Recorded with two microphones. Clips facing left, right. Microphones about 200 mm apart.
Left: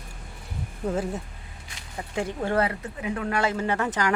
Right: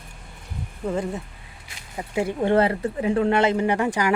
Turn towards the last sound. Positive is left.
turn(degrees=-10)  # may be behind; listen again after turning